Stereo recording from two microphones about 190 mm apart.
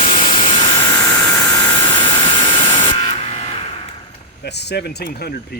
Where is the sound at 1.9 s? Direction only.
25° left (ahead or behind).